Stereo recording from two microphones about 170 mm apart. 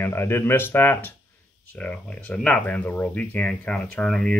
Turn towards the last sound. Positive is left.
turn(degrees=5)  # may be behind; listen again after turning